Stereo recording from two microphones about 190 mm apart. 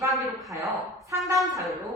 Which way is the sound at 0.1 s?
Centre (ahead or behind).